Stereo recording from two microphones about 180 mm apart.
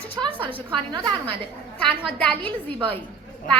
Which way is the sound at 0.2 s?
30° right (ahead or behind).